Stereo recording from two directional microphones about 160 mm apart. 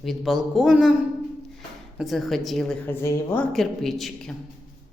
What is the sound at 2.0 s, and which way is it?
A woman's voice, centre (ahead or behind).